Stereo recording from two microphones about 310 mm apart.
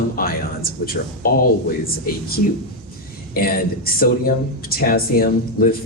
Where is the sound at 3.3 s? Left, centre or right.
Left.